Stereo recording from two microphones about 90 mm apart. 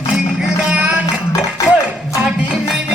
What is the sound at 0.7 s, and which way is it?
Music, 15° right (ahead or behind).